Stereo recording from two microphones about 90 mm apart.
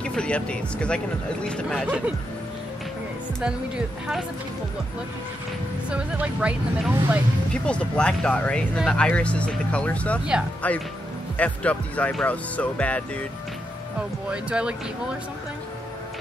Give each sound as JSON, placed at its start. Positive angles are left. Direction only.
{"t": 0.0, "sound": "speech", "side_deg": 10}
{"t": 3.4, "sound": "speech", "side_deg": -10}
{"t": 5.9, "sound": "speech", "side_deg": -15}
{"t": 7.5, "sound": "speech", "side_deg": 10}
{"t": 14.3, "sound": "speech", "side_deg": -10}